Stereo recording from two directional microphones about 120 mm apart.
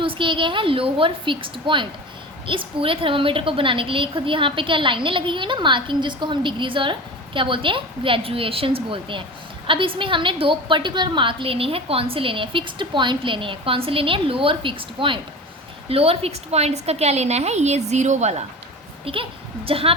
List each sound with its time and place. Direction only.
0.0 s a woman's voice: 45° right (ahead or behind); by 18.4 s 70° right (ahead or behind)
19.1 s a woman's voice: 50° right (ahead or behind)